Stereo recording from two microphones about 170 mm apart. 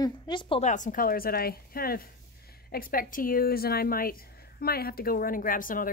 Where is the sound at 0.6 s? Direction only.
50° left (ahead or behind).